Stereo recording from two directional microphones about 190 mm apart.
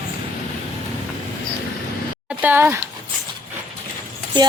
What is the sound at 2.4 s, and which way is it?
Speech, 10° right (ahead or behind).